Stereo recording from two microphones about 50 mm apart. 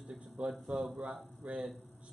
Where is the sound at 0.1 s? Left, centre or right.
Centre.